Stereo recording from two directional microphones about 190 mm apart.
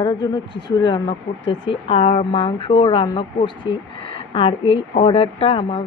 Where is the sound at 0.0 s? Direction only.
20° left (ahead or behind).